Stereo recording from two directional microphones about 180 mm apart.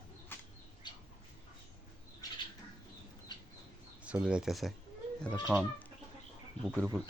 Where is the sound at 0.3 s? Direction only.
10° left (ahead or behind).